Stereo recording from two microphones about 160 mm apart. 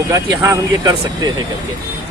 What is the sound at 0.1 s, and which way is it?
Speech, 20° right (ahead or behind).